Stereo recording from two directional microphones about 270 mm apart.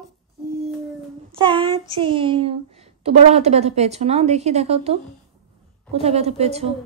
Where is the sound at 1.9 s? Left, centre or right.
Centre.